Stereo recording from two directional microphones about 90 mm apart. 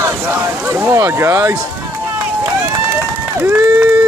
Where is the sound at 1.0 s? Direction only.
30° right (ahead or behind).